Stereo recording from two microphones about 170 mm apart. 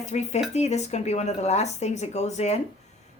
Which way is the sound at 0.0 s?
40° left (ahead or behind).